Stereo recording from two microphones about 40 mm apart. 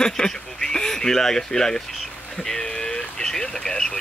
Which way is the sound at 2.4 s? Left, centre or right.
Centre.